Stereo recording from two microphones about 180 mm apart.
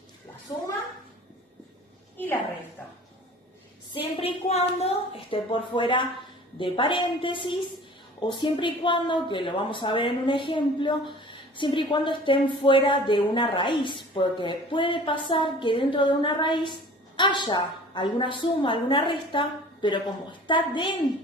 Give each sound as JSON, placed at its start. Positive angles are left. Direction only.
{"t": 0.5, "sound": "a woman's voice", "side_deg": 20}
{"t": 4.2, "sound": "a woman's voice", "side_deg": 35}